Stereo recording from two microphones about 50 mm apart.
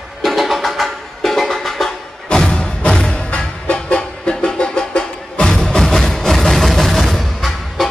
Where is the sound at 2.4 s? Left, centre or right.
Centre.